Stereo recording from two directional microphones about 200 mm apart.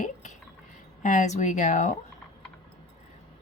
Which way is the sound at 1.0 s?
35° left (ahead or behind).